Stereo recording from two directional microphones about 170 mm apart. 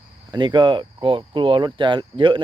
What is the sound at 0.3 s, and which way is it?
Speech, 25° right (ahead or behind).